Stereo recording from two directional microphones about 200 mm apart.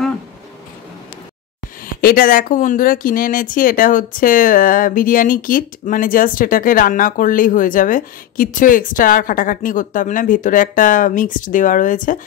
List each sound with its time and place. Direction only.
2.0 s speech: 45° left (ahead or behind)